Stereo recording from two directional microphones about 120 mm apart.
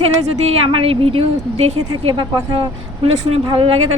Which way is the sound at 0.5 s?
50° right (ahead or behind).